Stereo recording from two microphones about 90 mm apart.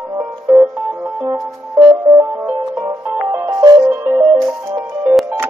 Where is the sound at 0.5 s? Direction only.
10° right (ahead or behind).